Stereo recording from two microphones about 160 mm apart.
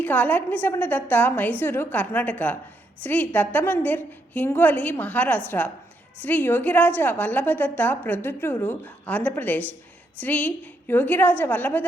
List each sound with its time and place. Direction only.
0.0 s a woman's voice: 10° left (ahead or behind)